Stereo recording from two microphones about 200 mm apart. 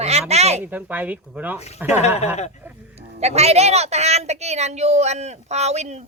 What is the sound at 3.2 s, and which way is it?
Speech, 30° right (ahead or behind).